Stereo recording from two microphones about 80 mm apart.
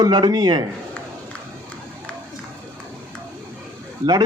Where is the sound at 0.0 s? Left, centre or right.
Right.